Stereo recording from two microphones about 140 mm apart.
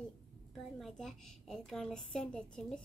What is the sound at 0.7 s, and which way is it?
A woman's voice, 5° left (ahead or behind).